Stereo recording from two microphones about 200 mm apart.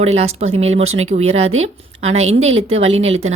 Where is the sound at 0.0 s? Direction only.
30° right (ahead or behind).